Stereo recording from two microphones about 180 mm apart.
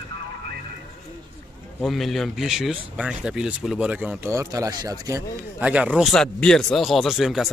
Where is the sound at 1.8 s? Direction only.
Centre (ahead or behind); by 5.2 s 20° right (ahead or behind).